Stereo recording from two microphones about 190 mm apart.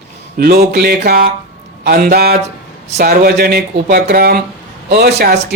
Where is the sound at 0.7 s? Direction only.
55° right (ahead or behind).